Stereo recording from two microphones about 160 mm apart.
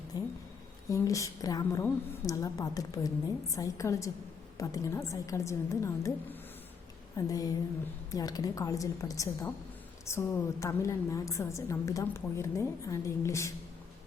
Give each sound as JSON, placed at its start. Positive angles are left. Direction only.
{"t": 0.1, "sound": "a sound", "side_deg": 20}
{"t": 0.9, "sound": "a woman's voice", "side_deg": 20}
{"t": 7.3, "sound": "a woman's voice", "side_deg": 20}